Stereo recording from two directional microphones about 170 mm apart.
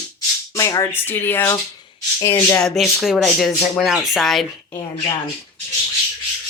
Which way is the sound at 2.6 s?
Centre (ahead or behind).